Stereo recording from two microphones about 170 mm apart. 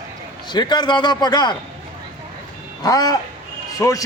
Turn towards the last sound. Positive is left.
turn(degrees=20)  # may be behind; listen again after turning